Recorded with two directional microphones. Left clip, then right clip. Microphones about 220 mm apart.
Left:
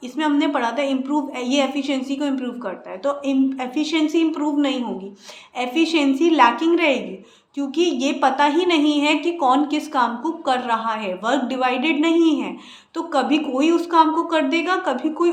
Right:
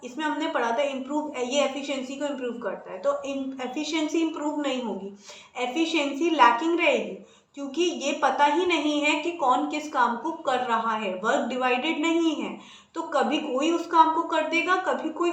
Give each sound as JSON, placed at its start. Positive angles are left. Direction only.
{"t": 0.2, "sound": "a woman's voice", "side_deg": 55}